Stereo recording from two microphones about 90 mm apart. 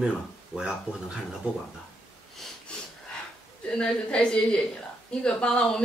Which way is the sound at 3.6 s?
10° left (ahead or behind).